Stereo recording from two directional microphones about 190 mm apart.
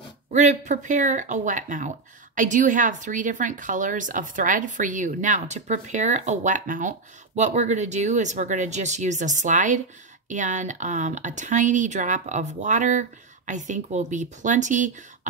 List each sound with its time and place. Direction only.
0.3 s a woman's voice: 35° right (ahead or behind)